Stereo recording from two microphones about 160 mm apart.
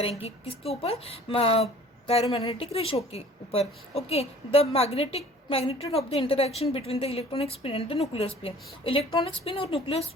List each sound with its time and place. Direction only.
0.0 s speech: 40° left (ahead or behind)